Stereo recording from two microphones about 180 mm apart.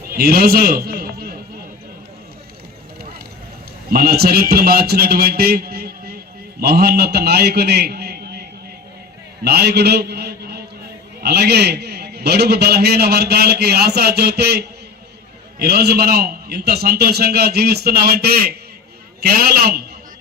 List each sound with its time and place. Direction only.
0.1 s a man's voice: 60° right (ahead or behind)
3.9 s a man's voice: 60° right (ahead or behind)